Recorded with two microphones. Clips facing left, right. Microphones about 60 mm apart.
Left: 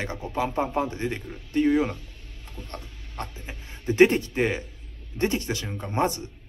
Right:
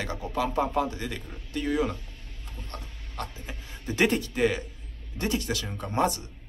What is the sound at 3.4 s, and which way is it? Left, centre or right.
A man's voice, left.